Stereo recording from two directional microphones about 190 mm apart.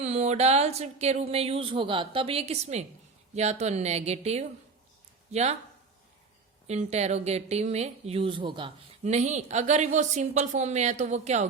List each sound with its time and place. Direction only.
0.0 s speech: 35° right (ahead or behind)
6.7 s speech: 35° right (ahead or behind)